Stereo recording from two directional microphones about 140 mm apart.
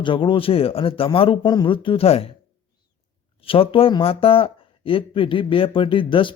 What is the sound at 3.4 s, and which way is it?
Speech, 40° left (ahead or behind).